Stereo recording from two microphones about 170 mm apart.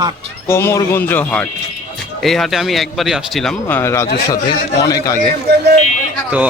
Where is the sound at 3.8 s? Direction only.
15° left (ahead or behind).